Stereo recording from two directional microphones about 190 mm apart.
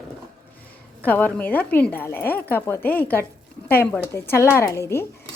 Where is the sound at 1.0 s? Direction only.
10° left (ahead or behind).